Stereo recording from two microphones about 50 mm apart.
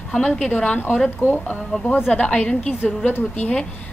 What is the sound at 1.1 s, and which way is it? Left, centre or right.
Speech, left.